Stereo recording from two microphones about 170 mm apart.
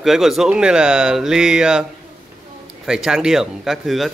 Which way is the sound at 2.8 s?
5° right (ahead or behind).